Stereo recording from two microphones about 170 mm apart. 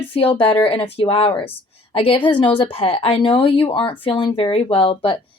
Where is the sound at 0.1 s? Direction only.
30° left (ahead or behind).